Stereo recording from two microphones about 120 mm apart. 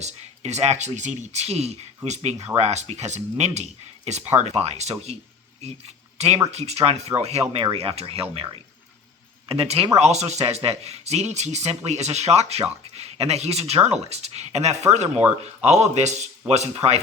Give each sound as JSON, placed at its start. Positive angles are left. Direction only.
{"t": 0.0, "sound": "speech", "side_deg": -70}
{"t": 6.1, "sound": "speech", "side_deg": -60}
{"t": 9.5, "sound": "speech", "side_deg": -55}
{"t": 16.5, "sound": "speech", "side_deg": -60}